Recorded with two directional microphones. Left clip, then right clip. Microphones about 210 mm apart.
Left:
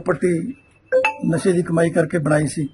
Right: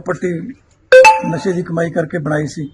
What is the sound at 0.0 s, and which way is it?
Speech, 20° left (ahead or behind).